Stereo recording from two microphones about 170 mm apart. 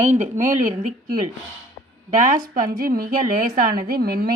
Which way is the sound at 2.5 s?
60° right (ahead or behind).